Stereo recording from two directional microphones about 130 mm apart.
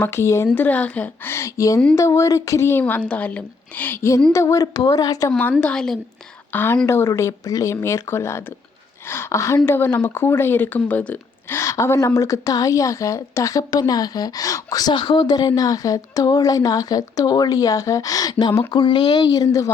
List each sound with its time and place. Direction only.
0.0 s speech: 20° left (ahead or behind)
5.4 s a woman's voice: 10° left (ahead or behind)